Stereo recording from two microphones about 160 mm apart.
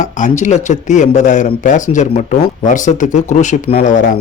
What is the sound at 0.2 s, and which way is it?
Speech, 50° left (ahead or behind).